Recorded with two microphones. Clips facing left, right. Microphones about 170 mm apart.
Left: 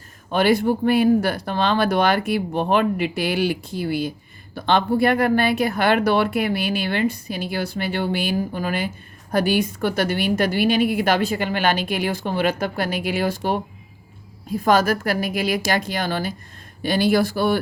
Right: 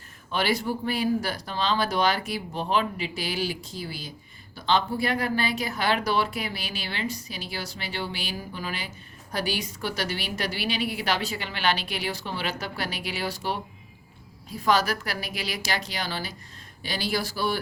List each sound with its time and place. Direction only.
0.3 s a woman's voice: 50° left (ahead or behind)